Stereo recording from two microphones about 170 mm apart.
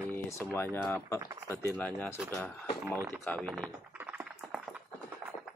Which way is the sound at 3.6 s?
10° right (ahead or behind).